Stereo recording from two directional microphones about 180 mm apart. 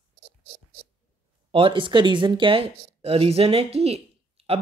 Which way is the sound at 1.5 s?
30° right (ahead or behind).